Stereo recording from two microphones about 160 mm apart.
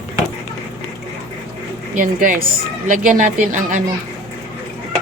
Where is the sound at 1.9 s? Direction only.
55° right (ahead or behind).